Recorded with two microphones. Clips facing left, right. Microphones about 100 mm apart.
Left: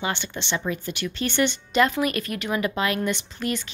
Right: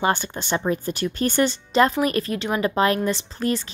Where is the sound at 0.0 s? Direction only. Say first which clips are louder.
Right 6 dB; 45° right (ahead or behind).